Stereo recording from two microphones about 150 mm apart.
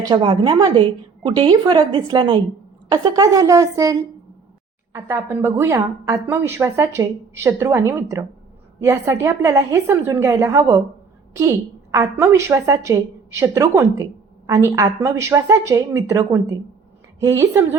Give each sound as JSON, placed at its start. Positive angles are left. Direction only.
{"t": 0.0, "sound": "a woman's voice", "side_deg": -30}
{"t": 4.9, "sound": "a woman's voice", "side_deg": -15}